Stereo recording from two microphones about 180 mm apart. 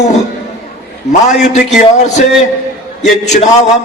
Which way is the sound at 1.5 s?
40° left (ahead or behind).